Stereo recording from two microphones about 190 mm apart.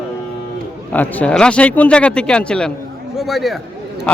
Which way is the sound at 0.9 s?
10° left (ahead or behind).